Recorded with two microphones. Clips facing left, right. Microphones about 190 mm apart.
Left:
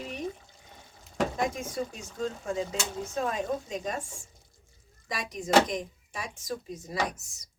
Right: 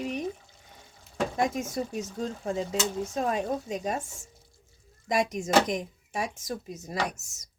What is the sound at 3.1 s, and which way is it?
Speech, 40° right (ahead or behind).